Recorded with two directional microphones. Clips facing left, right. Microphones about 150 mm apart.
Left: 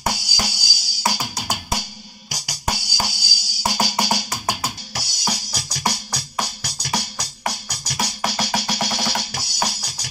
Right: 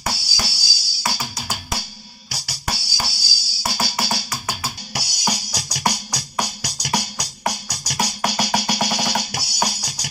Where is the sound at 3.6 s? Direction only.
15° left (ahead or behind).